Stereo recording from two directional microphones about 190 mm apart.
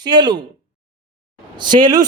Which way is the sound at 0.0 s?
20° right (ahead or behind).